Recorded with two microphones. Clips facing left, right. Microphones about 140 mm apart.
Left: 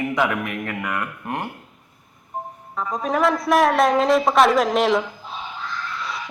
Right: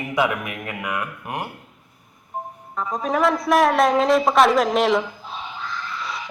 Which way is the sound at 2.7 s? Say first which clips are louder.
Even; centre (ahead or behind).